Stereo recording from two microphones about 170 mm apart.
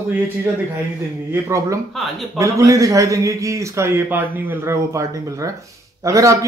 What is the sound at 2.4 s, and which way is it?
Speech, 20° right (ahead or behind).